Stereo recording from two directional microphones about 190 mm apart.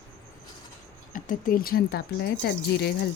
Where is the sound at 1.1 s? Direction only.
45° left (ahead or behind).